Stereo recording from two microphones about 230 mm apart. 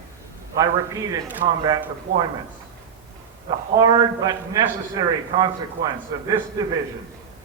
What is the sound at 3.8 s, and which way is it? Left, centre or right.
Speech, centre.